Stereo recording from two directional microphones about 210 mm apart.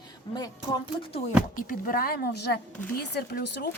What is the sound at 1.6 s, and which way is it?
Speech, 40° left (ahead or behind).